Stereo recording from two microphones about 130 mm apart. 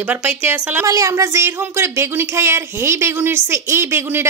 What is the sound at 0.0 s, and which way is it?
A woman's voice, 15° right (ahead or behind).